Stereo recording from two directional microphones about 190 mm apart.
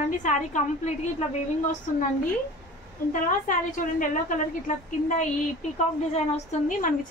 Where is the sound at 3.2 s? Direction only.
45° left (ahead or behind).